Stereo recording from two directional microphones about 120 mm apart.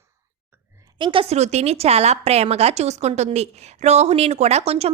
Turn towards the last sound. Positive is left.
turn(degrees=-60)  # may be behind; listen again after turning